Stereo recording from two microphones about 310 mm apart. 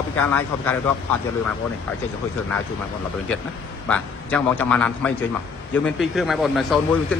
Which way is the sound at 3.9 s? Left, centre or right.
Centre.